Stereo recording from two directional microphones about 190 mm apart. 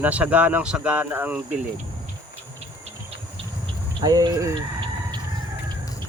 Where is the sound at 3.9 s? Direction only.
20° right (ahead or behind).